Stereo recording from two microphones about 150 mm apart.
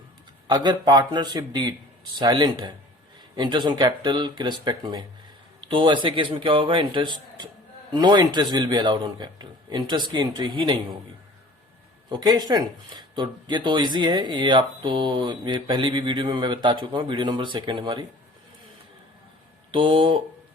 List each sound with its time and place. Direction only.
0.4 s a man's voice: 30° right (ahead or behind)
12.0 s speech: 30° right (ahead or behind)
19.7 s speech: 35° right (ahead or behind)